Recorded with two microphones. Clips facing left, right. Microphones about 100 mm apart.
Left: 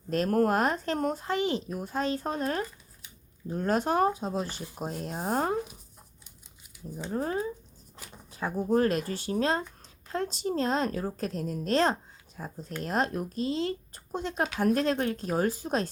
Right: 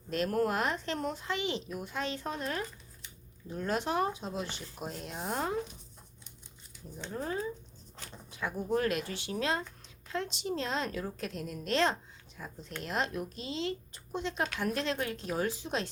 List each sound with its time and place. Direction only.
0.1 s a woman's voice: 45° left (ahead or behind)
7.1 s a woman's voice: 40° left (ahead or behind)